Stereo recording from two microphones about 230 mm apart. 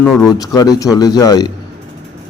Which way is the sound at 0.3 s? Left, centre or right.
Centre.